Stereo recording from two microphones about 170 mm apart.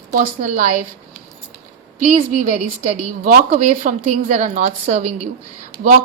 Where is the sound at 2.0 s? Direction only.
40° right (ahead or behind).